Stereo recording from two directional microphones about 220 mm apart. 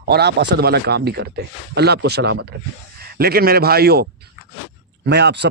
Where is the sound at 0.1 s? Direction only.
50° right (ahead or behind).